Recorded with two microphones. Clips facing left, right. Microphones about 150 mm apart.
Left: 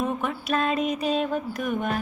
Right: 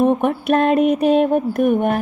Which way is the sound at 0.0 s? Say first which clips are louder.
Right 11 dB; 60° right (ahead or behind).